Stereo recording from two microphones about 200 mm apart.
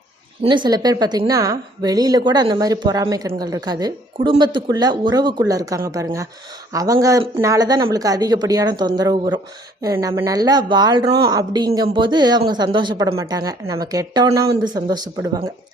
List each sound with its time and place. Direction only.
0.4 s a woman's voice: 25° right (ahead or behind)